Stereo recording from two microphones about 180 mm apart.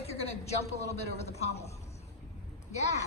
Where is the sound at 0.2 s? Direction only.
35° left (ahead or behind).